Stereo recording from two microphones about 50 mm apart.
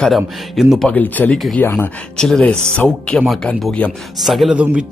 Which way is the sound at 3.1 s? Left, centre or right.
Centre.